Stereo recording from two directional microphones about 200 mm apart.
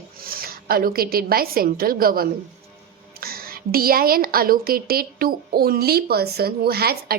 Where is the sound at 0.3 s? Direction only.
45° right (ahead or behind).